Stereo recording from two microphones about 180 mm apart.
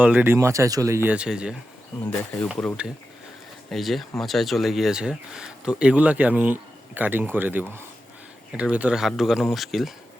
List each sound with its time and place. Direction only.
0.0 s speech: 10° right (ahead or behind)
2.0 s speech: 10° left (ahead or behind)
2.5 s speech: centre (ahead or behind)
8.7 s speech: 5° right (ahead or behind)